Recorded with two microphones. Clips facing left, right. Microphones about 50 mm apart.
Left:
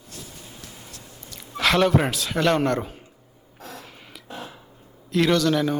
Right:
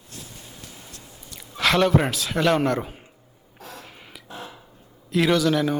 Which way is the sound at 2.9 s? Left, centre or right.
Centre.